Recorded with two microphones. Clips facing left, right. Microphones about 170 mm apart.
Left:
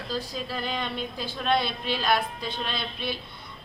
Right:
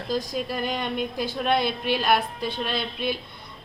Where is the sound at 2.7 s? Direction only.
50° right (ahead or behind).